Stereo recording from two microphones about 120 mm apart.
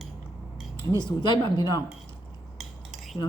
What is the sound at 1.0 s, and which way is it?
Speech, 35° left (ahead or behind).